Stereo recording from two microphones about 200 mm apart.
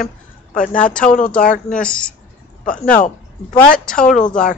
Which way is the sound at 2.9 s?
40° left (ahead or behind).